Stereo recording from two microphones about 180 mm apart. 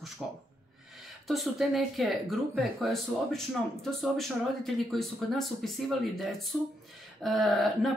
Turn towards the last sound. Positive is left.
turn(degrees=0)  # may be behind; listen again after turning